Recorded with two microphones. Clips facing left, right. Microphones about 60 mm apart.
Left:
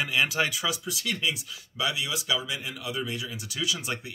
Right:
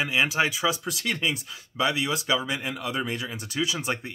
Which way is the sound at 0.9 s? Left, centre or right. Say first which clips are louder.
Right 2 dB; right.